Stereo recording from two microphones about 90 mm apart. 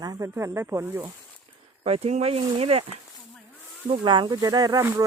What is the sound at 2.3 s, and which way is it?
Speech, 90° right.